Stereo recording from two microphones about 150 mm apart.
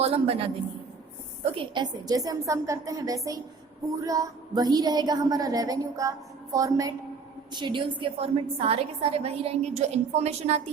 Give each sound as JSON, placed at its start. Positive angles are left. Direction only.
{"t": 0.0, "sound": "a woman's voice", "side_deg": -40}